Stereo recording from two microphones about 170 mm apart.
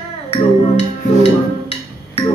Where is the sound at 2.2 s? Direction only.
35° left (ahead or behind).